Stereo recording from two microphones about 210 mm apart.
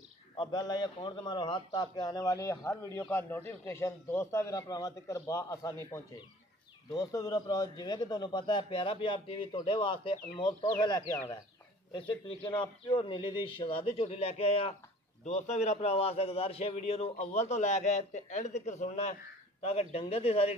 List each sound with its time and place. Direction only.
0.4 s a man's voice: 20° left (ahead or behind)